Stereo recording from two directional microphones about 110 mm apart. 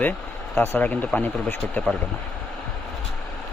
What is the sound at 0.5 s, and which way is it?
Speech, 20° left (ahead or behind).